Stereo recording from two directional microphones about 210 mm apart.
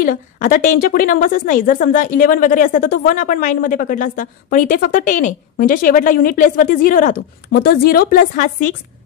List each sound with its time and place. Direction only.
0.0 s a woman's voice: 40° left (ahead or behind)